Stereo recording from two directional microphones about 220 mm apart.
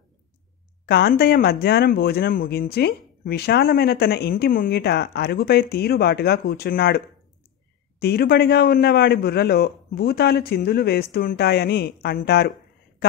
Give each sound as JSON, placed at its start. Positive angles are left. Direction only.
{"t": 0.8, "sound": "speech", "side_deg": 45}
{"t": 8.0, "sound": "speech", "side_deg": 45}